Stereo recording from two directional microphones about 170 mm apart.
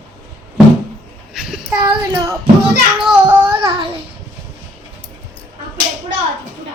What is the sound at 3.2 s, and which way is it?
Child singing, 20° right (ahead or behind).